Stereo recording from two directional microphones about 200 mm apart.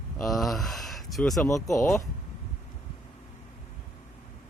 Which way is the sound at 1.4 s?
15° left (ahead or behind).